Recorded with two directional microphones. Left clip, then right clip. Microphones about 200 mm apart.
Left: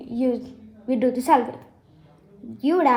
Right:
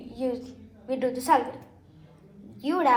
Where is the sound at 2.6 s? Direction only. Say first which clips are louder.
Left 3 dB; 55° left (ahead or behind).